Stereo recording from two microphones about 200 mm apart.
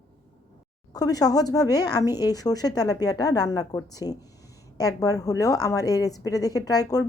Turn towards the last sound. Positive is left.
turn(degrees=20)  # may be behind; listen again after turning